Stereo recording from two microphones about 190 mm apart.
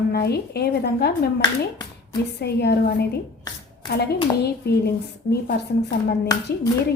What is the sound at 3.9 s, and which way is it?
Speech, 60° left (ahead or behind).